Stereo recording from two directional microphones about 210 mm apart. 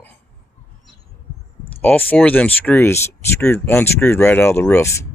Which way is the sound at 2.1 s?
10° left (ahead or behind).